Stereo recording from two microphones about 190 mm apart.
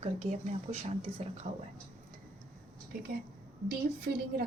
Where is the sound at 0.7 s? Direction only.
35° right (ahead or behind).